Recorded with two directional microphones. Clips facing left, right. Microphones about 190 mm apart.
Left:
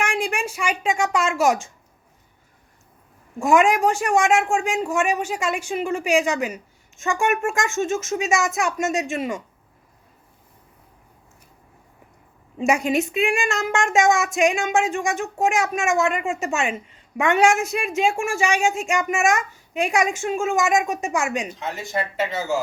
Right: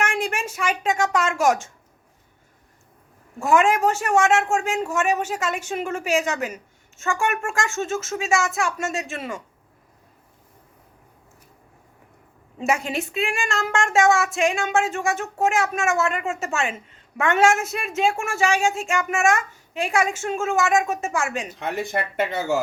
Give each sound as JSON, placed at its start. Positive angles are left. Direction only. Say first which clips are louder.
{"t": 0.0, "sound": "speech", "louder": "left 1 dB", "side_deg": 10}
{"t": 3.3, "sound": "a woman's voice", "louder": "left 1 dB", "side_deg": 15}
{"t": 12.6, "sound": "a woman's voice", "louder": "left 4 dB", "side_deg": 15}
{"t": 21.6, "sound": "speech", "louder": "right 1 dB", "side_deg": -60}